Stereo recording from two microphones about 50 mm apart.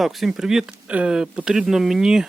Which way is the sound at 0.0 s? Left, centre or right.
Centre.